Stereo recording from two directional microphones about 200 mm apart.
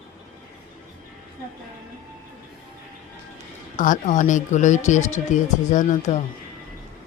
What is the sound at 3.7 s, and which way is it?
Speech, 40° left (ahead or behind).